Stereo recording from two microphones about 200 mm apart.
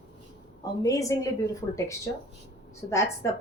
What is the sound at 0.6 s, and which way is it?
Speech, 15° left (ahead or behind).